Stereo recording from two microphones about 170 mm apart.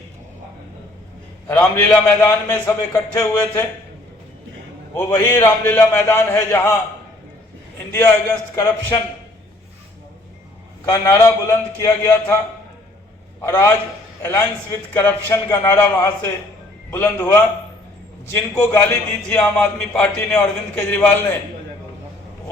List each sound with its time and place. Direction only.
1.5 s a man's voice: 10° left (ahead or behind)
4.9 s a man's voice: 15° left (ahead or behind)
7.9 s a man's voice: 10° left (ahead or behind)
10.9 s a man's voice: 15° left (ahead or behind)
13.4 s a man's voice: 15° left (ahead or behind)